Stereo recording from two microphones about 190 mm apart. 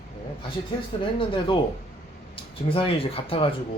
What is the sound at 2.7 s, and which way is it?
Speech, 30° left (ahead or behind).